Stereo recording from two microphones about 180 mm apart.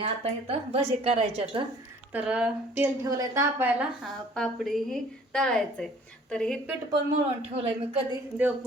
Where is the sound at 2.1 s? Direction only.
5° right (ahead or behind).